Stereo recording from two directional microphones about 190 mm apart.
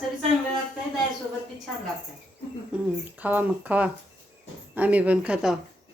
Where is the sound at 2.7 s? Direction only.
10° right (ahead or behind).